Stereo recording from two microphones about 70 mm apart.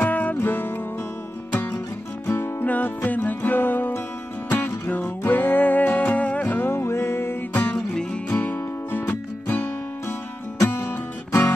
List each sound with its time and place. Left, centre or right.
0.0 s music: left
7.5 s music: centre
8.4 s music: left
10.9 s music: left